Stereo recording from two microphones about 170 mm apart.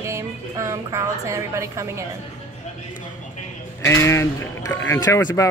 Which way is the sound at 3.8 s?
15° left (ahead or behind).